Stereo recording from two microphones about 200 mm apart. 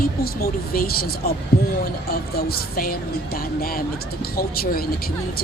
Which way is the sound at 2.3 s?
50° left (ahead or behind).